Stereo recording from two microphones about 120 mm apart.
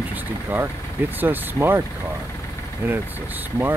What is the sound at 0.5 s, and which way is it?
Speech, 15° right (ahead or behind).